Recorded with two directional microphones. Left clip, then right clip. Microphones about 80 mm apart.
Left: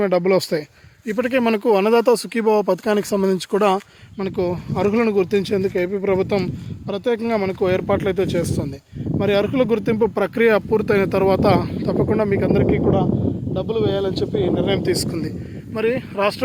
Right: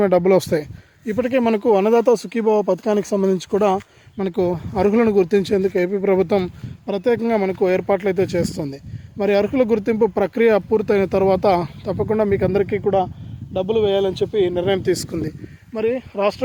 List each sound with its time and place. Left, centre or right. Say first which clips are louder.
0.0 s speech: right 2 dB; right
1.1 s speech: even; centre
4.2 s speech: right 2 dB; right
5.5 s speech: right 2 dB; right
6.1 s speech: right 2 dB; right
7.3 s speech: right 1 dB; right
9.1 s speech: right 1 dB; right
11.9 s speech: even; right
12.5 s speech: left 1 dB; right
13.5 s speech: right 4 dB; right
14.8 s speech: even; right
15.7 s speech: even; centre